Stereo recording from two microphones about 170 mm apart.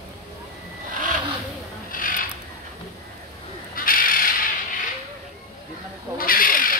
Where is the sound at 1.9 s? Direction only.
55° left (ahead or behind).